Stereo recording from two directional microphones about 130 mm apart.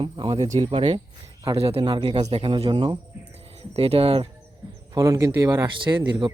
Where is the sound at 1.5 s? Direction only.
50° right (ahead or behind).